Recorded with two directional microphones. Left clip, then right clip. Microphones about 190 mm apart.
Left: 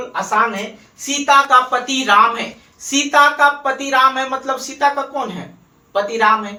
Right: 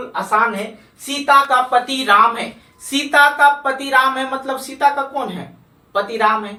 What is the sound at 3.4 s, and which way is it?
Speech, 15° right (ahead or behind).